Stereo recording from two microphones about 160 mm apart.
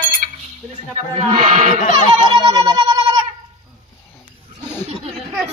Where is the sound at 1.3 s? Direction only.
45° right (ahead or behind).